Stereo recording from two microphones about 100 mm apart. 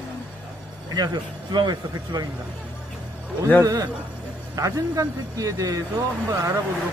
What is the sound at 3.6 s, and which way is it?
Speech, 35° right (ahead or behind).